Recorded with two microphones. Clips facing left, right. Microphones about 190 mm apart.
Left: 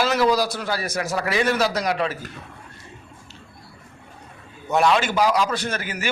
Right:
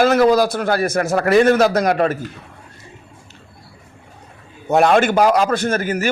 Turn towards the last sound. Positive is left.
turn(degrees=-45)  # may be behind; listen again after turning